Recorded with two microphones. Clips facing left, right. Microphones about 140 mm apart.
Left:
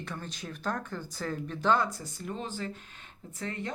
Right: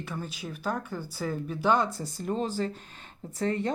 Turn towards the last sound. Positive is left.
turn(degrees=-35)  # may be behind; listen again after turning